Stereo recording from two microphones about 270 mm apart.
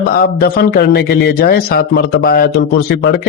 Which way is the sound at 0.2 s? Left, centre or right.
Left.